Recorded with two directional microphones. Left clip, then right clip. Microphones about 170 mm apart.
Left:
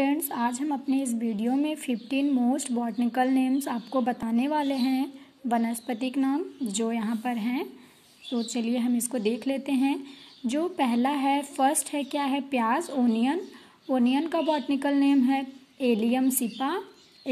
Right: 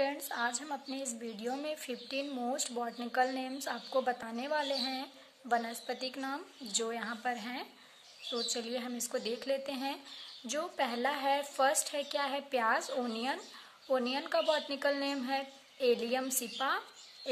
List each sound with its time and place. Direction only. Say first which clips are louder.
0.0 s a woman's voice: left 7 dB; 10° left (ahead or behind)